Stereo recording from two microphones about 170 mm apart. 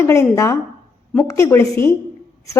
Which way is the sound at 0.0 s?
20° left (ahead or behind).